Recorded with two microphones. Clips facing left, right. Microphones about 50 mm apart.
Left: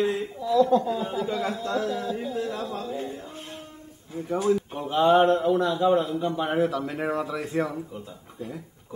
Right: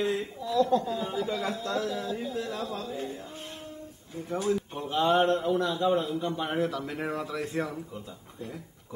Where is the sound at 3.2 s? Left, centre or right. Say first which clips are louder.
Left 2 dB; centre.